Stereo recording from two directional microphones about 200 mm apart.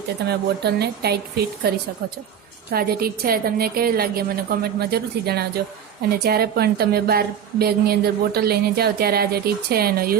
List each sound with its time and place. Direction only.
0.3 s a woman's voice: 55° right (ahead or behind)